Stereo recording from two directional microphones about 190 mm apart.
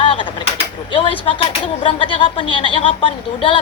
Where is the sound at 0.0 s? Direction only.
25° left (ahead or behind).